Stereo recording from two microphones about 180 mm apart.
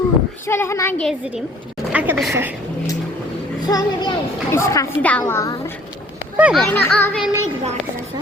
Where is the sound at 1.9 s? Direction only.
5° right (ahead or behind).